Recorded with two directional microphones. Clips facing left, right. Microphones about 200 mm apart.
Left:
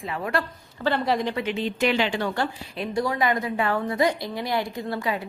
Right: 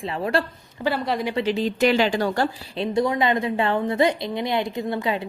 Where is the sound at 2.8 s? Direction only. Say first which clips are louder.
Right 3 dB; 20° right (ahead or behind).